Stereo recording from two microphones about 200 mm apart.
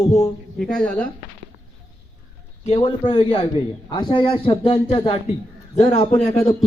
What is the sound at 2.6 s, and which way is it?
A man's voice, 30° left (ahead or behind).